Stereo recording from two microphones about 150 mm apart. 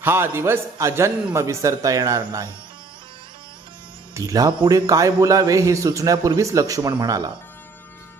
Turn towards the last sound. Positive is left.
turn(degrees=-25)  # may be behind; listen again after turning